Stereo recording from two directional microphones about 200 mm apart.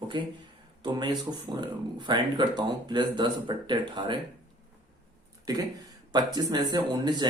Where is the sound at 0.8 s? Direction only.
20° right (ahead or behind).